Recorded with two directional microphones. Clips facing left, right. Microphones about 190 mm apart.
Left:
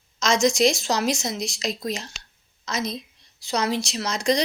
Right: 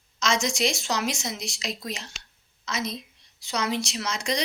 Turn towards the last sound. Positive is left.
turn(degrees=35)  # may be behind; listen again after turning